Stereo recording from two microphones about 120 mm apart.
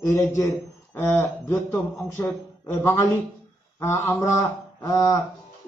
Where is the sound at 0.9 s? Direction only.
15° left (ahead or behind).